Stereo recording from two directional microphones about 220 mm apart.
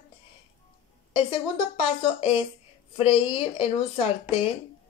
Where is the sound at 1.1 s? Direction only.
25° left (ahead or behind).